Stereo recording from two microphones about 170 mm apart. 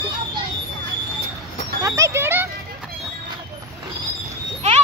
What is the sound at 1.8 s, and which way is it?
Speech, 20° right (ahead or behind).